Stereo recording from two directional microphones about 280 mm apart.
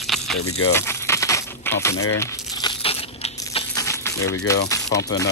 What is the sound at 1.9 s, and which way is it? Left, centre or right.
Speech, left.